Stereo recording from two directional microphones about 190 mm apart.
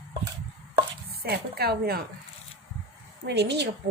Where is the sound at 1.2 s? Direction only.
55° right (ahead or behind).